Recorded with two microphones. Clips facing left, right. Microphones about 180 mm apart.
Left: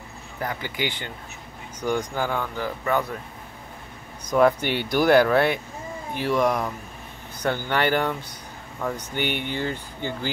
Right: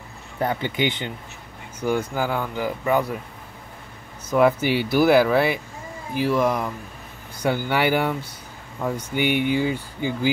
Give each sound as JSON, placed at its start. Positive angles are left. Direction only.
{"t": 0.4, "sound": "speech", "side_deg": -25}
{"t": 1.8, "sound": "speech", "side_deg": -10}
{"t": 4.3, "sound": "speech", "side_deg": -5}